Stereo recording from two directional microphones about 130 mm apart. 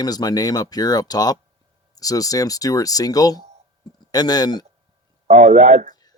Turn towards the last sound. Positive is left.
turn(degrees=-55)  # may be behind; listen again after turning